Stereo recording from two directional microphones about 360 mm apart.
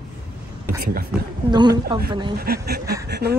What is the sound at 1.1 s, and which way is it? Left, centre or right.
Speech, centre.